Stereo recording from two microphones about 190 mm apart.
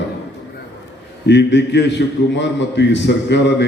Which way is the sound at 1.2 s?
65° left (ahead or behind).